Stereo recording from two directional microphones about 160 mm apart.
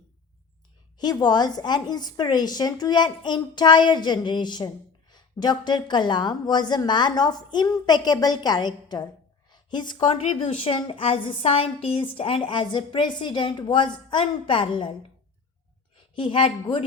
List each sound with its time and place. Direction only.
0.9 s a woman's voice: 25° left (ahead or behind)
16.1 s a woman's voice: 30° left (ahead or behind)